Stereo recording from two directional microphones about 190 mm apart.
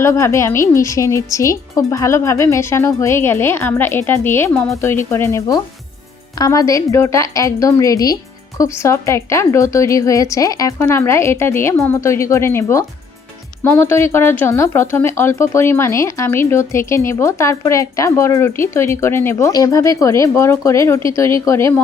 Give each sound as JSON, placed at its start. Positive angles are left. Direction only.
{"t": 0.0, "sound": "speech", "side_deg": 15}